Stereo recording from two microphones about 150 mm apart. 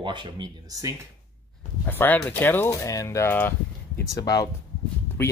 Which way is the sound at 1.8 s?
10° left (ahead or behind).